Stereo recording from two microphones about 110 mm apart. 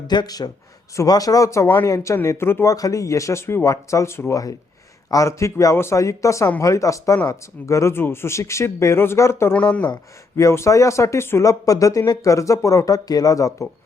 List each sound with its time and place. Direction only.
0.1 s speech: 40° left (ahead or behind)
1.6 s speech: 20° left (ahead or behind)
9.6 s speech: 10° left (ahead or behind)
10.3 s speech: 25° left (ahead or behind)